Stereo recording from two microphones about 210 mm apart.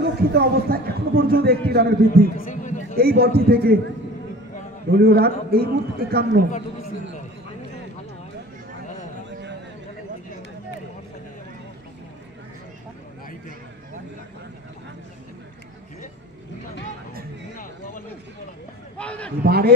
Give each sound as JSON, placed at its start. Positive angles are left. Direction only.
{"t": 0.0, "sound": "speech", "side_deg": -50}
{"t": 2.2, "sound": "speech", "side_deg": 40}
{"t": 3.0, "sound": "speech", "side_deg": -50}
{"t": 4.9, "sound": "speech", "side_deg": -50}
{"t": 6.5, "sound": "a man's voice", "side_deg": 35}
{"t": 18.9, "sound": "a sound", "side_deg": 5}
{"t": 19.4, "sound": "speech", "side_deg": -50}